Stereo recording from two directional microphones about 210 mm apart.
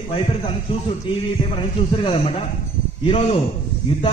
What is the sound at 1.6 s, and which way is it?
A man's voice, 25° left (ahead or behind).